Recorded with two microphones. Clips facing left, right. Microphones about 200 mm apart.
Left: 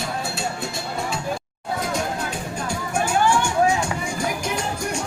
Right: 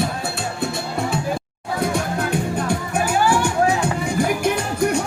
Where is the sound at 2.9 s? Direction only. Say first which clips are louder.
Even; 5° right (ahead or behind).